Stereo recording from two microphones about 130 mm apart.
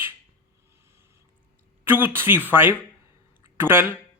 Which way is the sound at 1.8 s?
15° right (ahead or behind).